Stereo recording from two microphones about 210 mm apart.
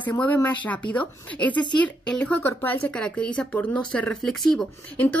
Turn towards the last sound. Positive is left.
turn(degrees=10)  # may be behind; listen again after turning